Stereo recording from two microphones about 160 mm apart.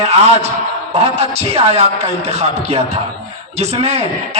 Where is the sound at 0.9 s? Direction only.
40° right (ahead or behind).